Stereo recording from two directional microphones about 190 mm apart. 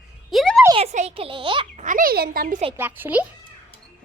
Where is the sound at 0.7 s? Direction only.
35° right (ahead or behind).